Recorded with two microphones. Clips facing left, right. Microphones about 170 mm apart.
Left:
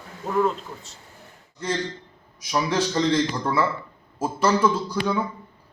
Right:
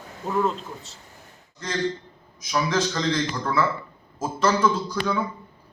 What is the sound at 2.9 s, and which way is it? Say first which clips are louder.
Speech: left 4 dB; 30° left (ahead or behind).